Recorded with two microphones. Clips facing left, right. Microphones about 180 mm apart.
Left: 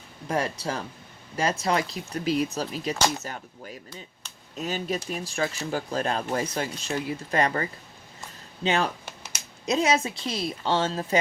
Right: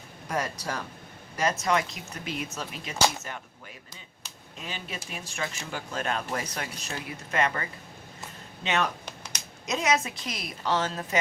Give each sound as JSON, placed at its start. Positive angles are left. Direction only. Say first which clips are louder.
{"t": 0.3, "sound": "a woman's voice", "louder": "left 4 dB", "side_deg": 30}
{"t": 4.5, "sound": "speech", "louder": "left 10 dB", "side_deg": 40}
{"t": 9.0, "sound": "a sound", "louder": "even", "side_deg": 5}
{"t": 9.6, "sound": "a woman's voice", "louder": "left 3 dB", "side_deg": 30}